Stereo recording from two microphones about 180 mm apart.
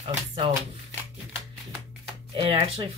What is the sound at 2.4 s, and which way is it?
Speech, 30° right (ahead or behind).